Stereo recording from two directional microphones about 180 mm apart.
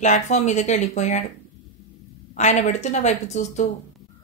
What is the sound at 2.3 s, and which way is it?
A woman's voice, 40° left (ahead or behind).